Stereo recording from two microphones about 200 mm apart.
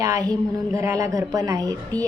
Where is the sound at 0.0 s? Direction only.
15° right (ahead or behind).